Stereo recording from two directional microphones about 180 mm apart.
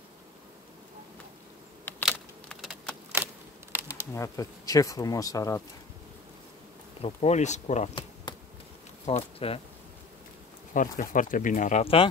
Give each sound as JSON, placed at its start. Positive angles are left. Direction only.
{"t": 1.9, "sound": "insect", "side_deg": 10}
{"t": 2.6, "sound": "a sound", "side_deg": 0}
{"t": 3.8, "sound": "speech", "side_deg": 15}
{"t": 7.0, "sound": "speech", "side_deg": 35}
{"t": 9.0, "sound": "speech", "side_deg": 30}
{"t": 10.7, "sound": "speech", "side_deg": 45}